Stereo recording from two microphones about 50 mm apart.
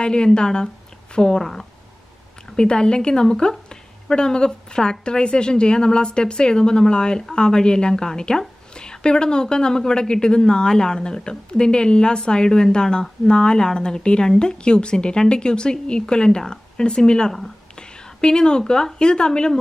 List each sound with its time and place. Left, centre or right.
0.0 s a woman's voice: centre